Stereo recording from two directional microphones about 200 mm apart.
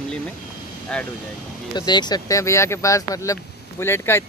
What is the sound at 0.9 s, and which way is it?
Speech, 5° left (ahead or behind).